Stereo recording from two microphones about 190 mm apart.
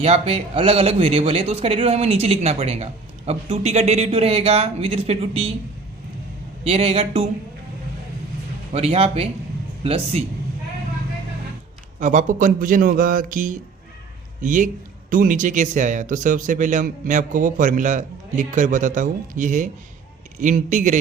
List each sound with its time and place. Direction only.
0.0 s a man's voice: 30° right (ahead or behind)
6.7 s a man's voice: 30° right (ahead or behind)
8.7 s a man's voice: 30° right (ahead or behind)
11.9 s a man's voice: 40° right (ahead or behind)